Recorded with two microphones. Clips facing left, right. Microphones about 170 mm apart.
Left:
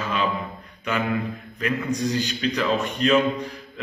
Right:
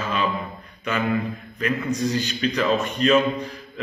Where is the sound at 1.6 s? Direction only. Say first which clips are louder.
Right 1 dB; 15° left (ahead or behind).